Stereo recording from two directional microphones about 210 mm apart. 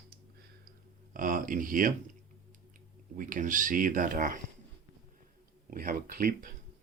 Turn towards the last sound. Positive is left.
turn(degrees=-40)  # may be behind; listen again after turning